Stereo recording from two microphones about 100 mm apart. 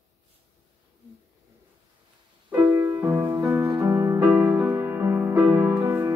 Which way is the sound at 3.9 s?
20° right (ahead or behind).